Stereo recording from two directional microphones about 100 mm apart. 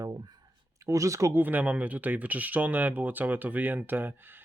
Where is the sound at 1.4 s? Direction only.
15° right (ahead or behind).